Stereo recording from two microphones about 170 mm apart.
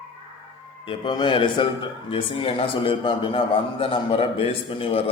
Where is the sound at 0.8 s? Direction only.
25° left (ahead or behind).